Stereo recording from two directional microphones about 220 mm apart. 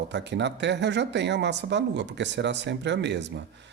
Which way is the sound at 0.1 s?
50° right (ahead or behind).